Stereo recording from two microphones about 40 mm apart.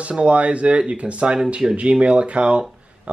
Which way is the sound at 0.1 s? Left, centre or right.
Right.